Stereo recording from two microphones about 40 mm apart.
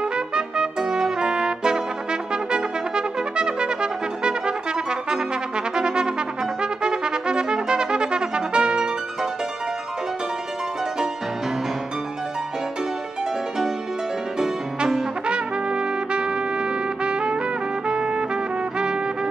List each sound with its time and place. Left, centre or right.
0.0 s trumpet: right
2.3 s brass instrument: right
5.8 s trumpet: right
14.8 s brass instrument: centre
15.2 s trumpet: right